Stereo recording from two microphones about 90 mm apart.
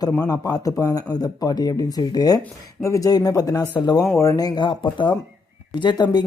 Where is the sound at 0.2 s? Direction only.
45° left (ahead or behind).